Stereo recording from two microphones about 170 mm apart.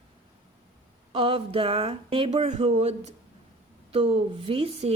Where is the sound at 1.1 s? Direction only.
35° right (ahead or behind).